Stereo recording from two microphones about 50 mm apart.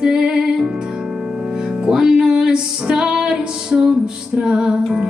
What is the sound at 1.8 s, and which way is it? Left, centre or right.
Music, centre.